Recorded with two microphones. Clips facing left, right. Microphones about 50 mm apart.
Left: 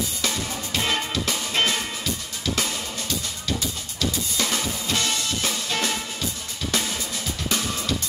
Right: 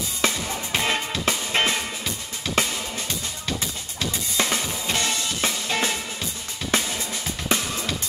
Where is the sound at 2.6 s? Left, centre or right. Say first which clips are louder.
Right 5 dB; right.